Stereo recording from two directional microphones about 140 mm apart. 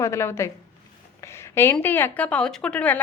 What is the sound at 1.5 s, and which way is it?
A woman's voice, 15° left (ahead or behind).